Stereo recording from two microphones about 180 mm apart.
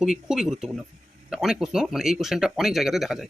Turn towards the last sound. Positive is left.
turn(degrees=0)  # may be behind; listen again after turning